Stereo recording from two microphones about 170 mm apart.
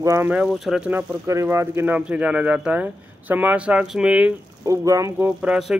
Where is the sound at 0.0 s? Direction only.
15° right (ahead or behind).